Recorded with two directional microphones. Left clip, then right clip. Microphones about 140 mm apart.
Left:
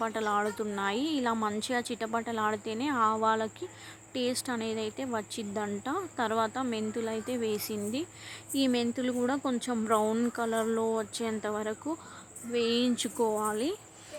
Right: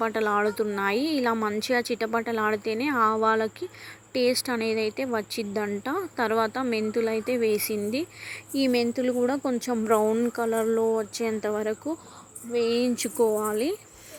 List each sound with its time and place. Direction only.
0.0 s speech: 25° right (ahead or behind)
10.1 s speech: 10° right (ahead or behind)